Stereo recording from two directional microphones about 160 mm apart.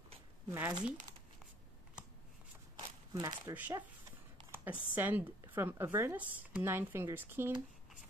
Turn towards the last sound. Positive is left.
turn(degrees=-15)  # may be behind; listen again after turning